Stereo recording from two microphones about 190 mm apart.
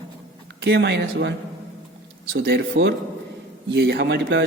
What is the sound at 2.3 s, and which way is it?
Speech, 60° right (ahead or behind).